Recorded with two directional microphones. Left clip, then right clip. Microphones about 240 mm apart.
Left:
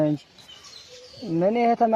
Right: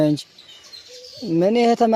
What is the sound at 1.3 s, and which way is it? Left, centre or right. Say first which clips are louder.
Speech: right 4 dB; right.